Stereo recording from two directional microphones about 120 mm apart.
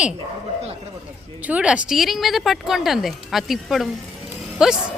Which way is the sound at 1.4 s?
10° right (ahead or behind).